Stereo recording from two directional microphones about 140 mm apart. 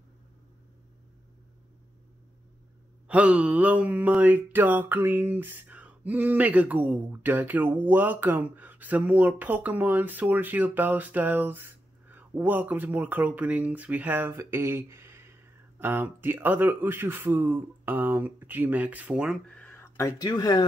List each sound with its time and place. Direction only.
3.1 s mantra: 10° right (ahead or behind)
19.4 s speech: 10° left (ahead or behind); by 20.6 s 30° left (ahead or behind)